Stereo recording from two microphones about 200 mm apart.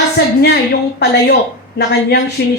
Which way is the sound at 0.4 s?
60° left (ahead or behind).